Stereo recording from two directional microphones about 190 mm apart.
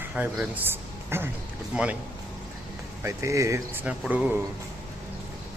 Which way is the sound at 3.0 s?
15° right (ahead or behind).